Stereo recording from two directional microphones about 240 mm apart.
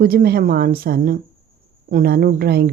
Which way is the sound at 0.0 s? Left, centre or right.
Right.